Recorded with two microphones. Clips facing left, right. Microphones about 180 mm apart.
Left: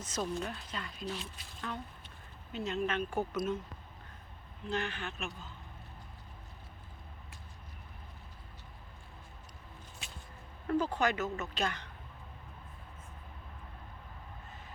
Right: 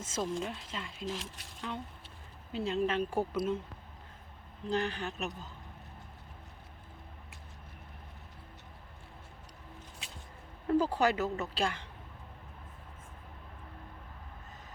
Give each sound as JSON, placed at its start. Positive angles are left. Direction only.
{"t": 0.0, "sound": "speech", "side_deg": -25}
{"t": 1.0, "sound": "speech", "side_deg": -90}
{"t": 1.7, "sound": "speech", "side_deg": -15}
{"t": 2.5, "sound": "a woman's voice", "side_deg": -30}
{"t": 4.7, "sound": "a woman's voice", "side_deg": -35}
{"t": 10.8, "sound": "a woman's voice", "side_deg": -35}